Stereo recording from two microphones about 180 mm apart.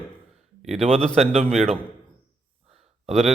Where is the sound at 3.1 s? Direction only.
35° right (ahead or behind).